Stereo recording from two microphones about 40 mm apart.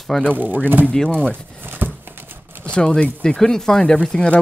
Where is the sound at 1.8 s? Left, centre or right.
Right.